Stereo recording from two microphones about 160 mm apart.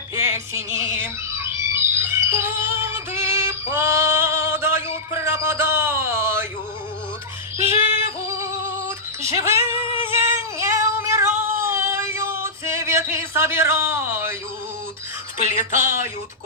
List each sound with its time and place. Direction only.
0.2 s a sound: 15° right (ahead or behind)
7.7 s singing: 15° right (ahead or behind)
9.2 s music: 15° right (ahead or behind)
10.0 s female singing: 15° right (ahead or behind)
15.7 s speech: 15° right (ahead or behind)